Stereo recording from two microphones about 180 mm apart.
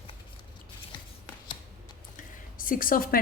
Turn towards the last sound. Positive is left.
turn(degrees=50)  # may be behind; listen again after turning